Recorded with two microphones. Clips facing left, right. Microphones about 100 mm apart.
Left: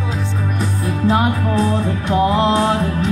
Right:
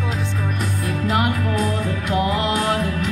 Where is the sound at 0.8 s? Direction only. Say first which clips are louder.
Left 5 dB; 30° left (ahead or behind).